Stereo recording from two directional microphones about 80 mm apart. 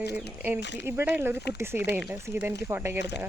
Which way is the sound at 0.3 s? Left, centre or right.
Right.